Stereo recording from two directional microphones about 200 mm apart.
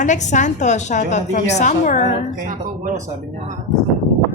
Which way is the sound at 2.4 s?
40° right (ahead or behind).